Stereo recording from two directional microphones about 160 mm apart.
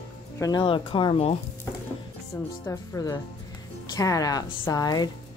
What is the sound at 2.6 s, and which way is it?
Speech, 20° left (ahead or behind).